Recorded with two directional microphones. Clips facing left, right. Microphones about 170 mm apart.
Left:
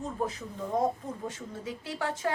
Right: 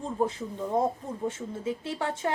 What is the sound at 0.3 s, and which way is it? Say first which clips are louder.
A woman's voice: right 3 dB; 25° right (ahead or behind).